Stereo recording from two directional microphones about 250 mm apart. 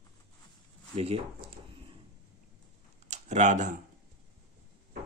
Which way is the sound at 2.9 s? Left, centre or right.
Right.